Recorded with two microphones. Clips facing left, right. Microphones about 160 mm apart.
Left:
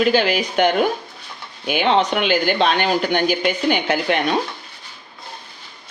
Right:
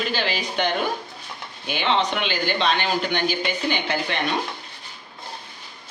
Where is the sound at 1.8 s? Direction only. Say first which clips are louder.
Left 5 dB; 45° left (ahead or behind).